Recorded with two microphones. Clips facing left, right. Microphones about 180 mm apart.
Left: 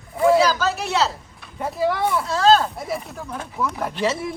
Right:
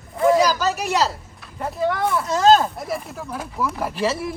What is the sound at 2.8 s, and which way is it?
A man's voice, centre (ahead or behind).